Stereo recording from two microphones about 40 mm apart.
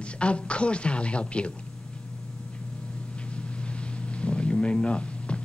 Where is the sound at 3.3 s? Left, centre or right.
Left.